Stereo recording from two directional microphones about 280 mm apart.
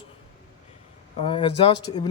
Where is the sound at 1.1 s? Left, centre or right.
Centre.